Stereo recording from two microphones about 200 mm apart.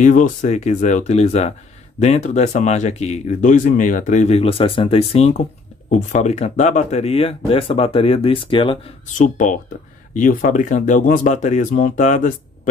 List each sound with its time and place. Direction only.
0.0 s speech: 40° left (ahead or behind)
9.2 s speech: 40° left (ahead or behind)